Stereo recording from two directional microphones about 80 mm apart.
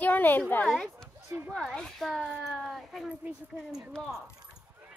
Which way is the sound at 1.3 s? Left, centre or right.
Right.